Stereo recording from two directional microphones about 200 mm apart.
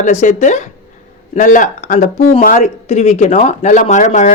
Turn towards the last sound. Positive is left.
turn(degrees=35)  # may be behind; listen again after turning